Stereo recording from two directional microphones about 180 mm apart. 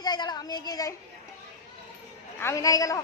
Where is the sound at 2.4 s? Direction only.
15° left (ahead or behind).